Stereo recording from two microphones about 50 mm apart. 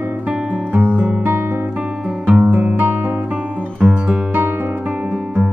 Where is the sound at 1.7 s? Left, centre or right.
Right.